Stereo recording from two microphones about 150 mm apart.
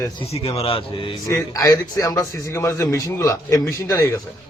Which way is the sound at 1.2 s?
20° left (ahead or behind).